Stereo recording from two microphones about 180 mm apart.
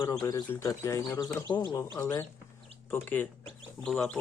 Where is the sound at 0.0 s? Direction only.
20° left (ahead or behind).